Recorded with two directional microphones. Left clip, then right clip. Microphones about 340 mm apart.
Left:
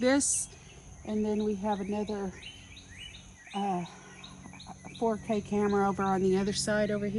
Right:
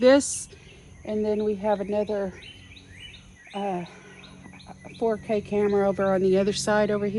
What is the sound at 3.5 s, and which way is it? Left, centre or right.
Speech, centre.